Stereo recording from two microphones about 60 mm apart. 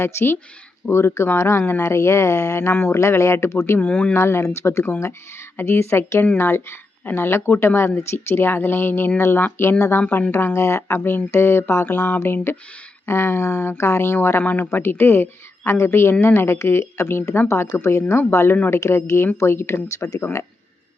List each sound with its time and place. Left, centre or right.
0.0 s speech: left
3.0 s speech: left
3.8 s speech: left
4.2 s speech: left
10.0 s speech: left
10.3 s speech: left
10.8 s speech: left